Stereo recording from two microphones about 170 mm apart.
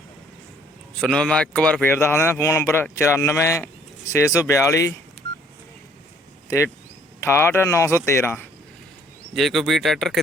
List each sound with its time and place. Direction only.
0.9 s speech: 5° left (ahead or behind)
7.2 s speech: 15° left (ahead or behind)
9.3 s speech: centre (ahead or behind)